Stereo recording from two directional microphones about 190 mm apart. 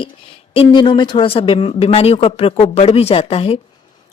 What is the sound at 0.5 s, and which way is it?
Speech, 25° left (ahead or behind).